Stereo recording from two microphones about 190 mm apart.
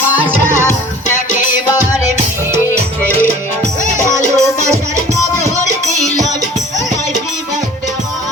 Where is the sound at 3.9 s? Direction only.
15° right (ahead or behind).